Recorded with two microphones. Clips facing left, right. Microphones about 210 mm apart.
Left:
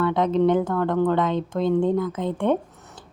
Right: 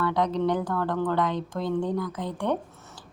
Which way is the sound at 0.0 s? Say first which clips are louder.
Left 5 dB; 25° left (ahead or behind).